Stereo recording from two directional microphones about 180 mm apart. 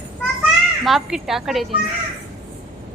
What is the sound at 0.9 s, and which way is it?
Speech, centre (ahead or behind).